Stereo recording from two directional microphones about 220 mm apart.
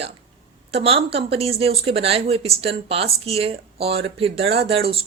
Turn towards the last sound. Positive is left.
turn(degrees=-25)  # may be behind; listen again after turning